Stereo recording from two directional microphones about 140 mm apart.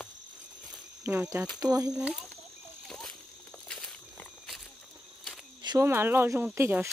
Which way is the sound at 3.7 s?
5° left (ahead or behind).